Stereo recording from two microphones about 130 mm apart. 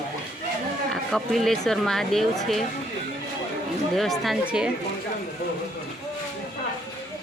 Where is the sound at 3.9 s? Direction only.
Centre (ahead or behind).